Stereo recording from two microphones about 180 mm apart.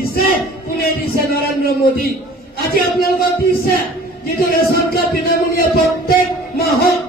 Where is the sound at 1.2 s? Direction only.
55° left (ahead or behind).